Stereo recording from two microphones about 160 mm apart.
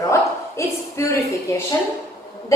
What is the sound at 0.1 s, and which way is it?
Bow-wow, 15° left (ahead or behind).